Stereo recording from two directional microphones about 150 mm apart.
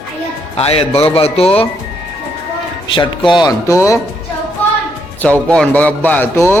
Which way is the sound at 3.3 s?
25° left (ahead or behind).